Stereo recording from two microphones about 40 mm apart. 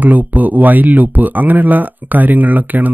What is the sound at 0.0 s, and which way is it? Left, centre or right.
Speech, right.